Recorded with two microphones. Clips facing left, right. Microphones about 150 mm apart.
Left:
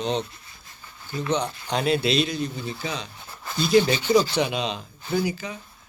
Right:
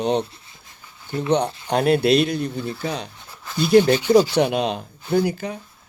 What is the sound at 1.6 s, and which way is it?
Speech, 55° right (ahead or behind).